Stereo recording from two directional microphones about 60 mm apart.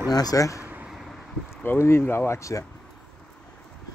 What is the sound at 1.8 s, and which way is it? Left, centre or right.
Speech, left.